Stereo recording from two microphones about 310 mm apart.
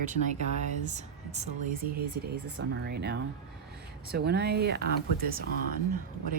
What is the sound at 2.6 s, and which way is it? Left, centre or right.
Speech, right.